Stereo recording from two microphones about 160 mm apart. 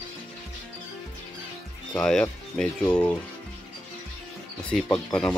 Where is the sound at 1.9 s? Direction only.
5° left (ahead or behind).